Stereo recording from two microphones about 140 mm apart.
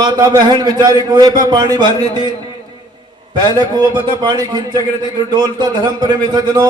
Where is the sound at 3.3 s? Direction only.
30° right (ahead or behind).